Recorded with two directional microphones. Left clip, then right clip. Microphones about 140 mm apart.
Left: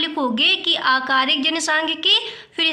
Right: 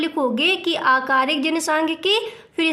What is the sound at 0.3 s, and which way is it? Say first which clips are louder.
A woman's voice: left 2 dB; 65° right (ahead or behind).